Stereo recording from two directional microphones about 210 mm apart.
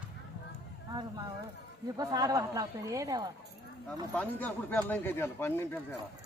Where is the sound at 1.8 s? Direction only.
15° right (ahead or behind).